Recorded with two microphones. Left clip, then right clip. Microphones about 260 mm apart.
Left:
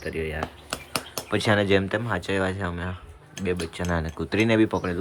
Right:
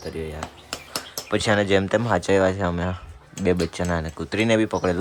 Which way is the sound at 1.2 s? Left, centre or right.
Centre.